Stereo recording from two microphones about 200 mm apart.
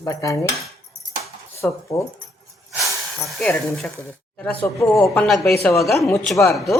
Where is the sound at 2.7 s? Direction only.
Centre (ahead or behind).